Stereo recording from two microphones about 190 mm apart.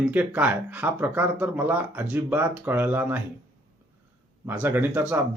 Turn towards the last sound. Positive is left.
turn(degrees=-10)  # may be behind; listen again after turning